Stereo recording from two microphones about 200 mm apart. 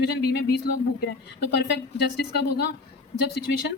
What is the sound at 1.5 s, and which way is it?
A woman's voice, 55° left (ahead or behind).